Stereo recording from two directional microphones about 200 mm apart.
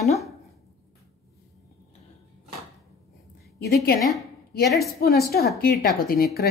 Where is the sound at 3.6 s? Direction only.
50° left (ahead or behind).